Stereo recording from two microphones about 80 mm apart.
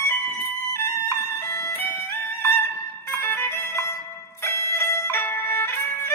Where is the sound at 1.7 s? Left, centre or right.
Left.